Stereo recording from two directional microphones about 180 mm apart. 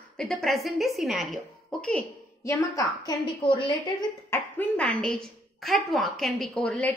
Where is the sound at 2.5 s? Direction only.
20° left (ahead or behind).